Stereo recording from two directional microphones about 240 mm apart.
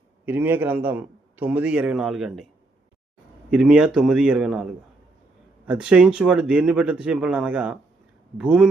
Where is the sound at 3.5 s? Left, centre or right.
Centre.